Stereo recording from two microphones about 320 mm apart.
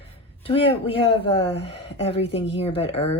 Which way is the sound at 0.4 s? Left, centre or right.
Centre.